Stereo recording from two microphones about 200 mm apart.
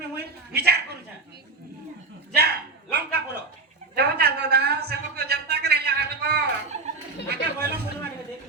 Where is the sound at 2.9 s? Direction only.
55° right (ahead or behind).